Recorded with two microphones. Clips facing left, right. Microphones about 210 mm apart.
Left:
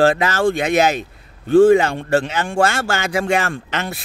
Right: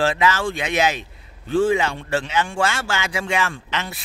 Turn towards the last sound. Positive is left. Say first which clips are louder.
# left 4 dB
turn(degrees=50)  # may be behind; listen again after turning